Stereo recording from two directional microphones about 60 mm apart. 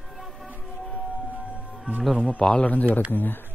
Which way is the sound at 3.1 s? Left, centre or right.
Left.